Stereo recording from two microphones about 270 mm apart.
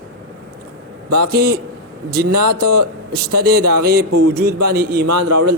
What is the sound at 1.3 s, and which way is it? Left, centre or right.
Speech, right.